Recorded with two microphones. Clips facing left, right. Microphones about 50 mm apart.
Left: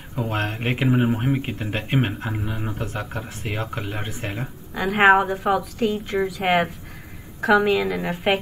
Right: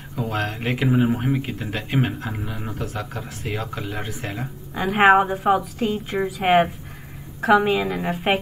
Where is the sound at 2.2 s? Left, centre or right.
Centre.